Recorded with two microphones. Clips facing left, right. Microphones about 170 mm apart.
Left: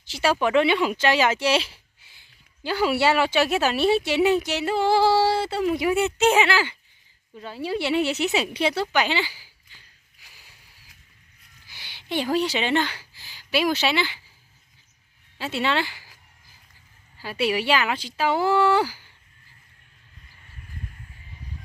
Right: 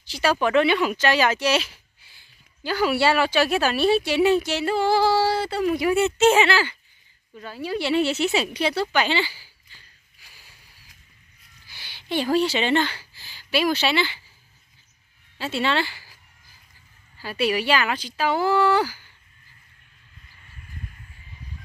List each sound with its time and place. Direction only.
0.0 s speech: 25° left (ahead or behind)
7.3 s speech: 25° left (ahead or behind)
8.9 s a sound: 15° left (ahead or behind)
11.6 s speech: 20° left (ahead or behind)
15.3 s speech: 15° left (ahead or behind)
17.2 s speech: 20° left (ahead or behind)